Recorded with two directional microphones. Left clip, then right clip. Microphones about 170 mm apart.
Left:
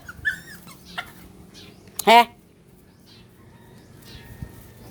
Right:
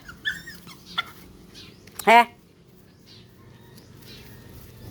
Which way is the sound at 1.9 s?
15° left (ahead or behind).